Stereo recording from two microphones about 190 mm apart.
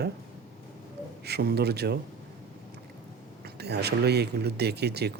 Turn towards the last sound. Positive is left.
turn(degrees=-60)  # may be behind; listen again after turning